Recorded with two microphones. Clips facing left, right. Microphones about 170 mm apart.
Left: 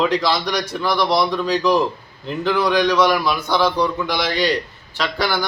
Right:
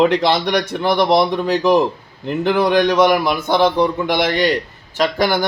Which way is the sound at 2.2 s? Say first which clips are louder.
Right 3 dB; 55° right (ahead or behind).